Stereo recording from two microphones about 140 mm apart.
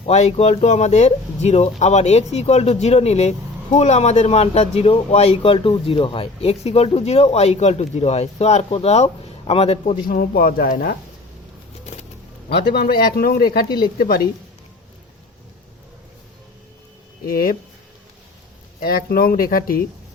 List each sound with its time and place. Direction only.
0.1 s speech: 50° left (ahead or behind)
10.1 s speech: 90° left
11.9 s pigeon: 55° left (ahead or behind)
12.7 s speech: 90° left
13.7 s speech: 30° left (ahead or behind)
14.0 s speech: 90° left
17.2 s speech: 90° left
18.8 s speech: 90° left